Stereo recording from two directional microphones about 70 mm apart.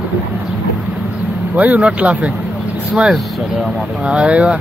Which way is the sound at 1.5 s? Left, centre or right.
Right.